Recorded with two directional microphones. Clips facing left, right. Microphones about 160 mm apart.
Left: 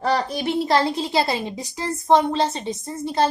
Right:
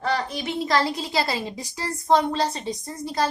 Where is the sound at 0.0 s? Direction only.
35° left (ahead or behind).